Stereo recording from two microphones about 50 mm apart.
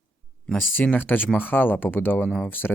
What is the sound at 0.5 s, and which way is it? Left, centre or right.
Speech, left.